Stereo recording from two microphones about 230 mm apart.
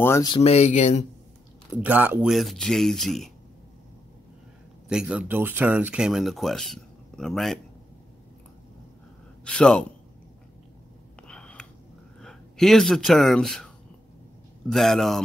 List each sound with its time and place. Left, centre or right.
0.0 s speech: centre
0.4 s speech: left
1.7 s speech: centre
4.8 s speech: centre
9.4 s speech: centre
11.2 s a sound: centre
12.2 s speech: centre
14.7 s speech: centre